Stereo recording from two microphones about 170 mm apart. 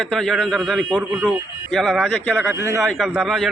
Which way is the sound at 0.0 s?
5° left (ahead or behind).